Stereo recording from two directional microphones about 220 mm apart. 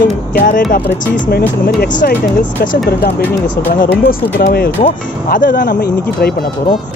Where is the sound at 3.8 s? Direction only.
40° left (ahead or behind).